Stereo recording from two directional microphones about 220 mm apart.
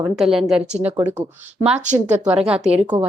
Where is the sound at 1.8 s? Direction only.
35° right (ahead or behind).